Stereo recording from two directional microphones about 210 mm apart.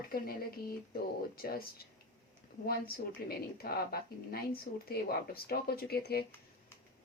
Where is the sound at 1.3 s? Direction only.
45° left (ahead or behind).